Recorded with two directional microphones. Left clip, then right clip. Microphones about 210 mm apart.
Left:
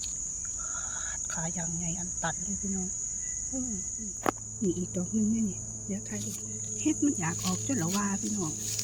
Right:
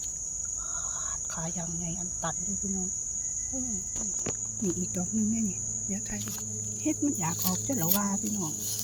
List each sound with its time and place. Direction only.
6.8 s speech: centre (ahead or behind)